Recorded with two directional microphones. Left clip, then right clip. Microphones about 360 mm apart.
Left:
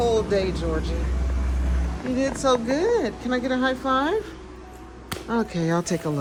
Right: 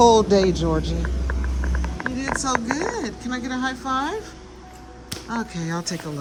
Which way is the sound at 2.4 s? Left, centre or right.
Centre.